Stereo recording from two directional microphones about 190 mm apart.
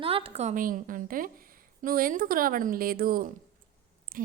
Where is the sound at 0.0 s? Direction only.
30° right (ahead or behind).